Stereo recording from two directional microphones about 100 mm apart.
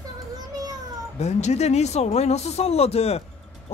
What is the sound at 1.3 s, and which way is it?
Speech, 90° left.